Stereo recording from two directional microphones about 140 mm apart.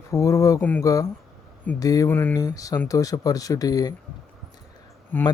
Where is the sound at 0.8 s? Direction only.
25° left (ahead or behind).